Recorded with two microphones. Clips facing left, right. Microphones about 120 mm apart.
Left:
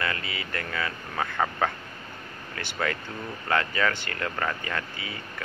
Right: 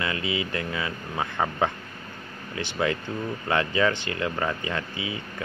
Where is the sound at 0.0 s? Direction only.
20° right (ahead or behind).